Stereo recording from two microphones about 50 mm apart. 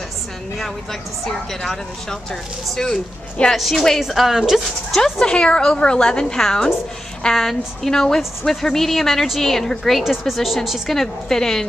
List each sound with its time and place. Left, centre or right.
1.2 s a woman's voice: centre
5.2 s a woman's voice: centre
11.0 s a woman's voice: centre